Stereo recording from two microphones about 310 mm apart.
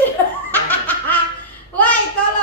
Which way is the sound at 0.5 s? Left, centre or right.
Centre.